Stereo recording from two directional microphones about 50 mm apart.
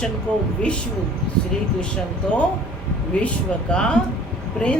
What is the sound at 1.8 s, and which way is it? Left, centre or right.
Speech, left.